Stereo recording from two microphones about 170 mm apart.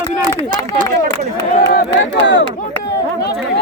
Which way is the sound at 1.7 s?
90° left.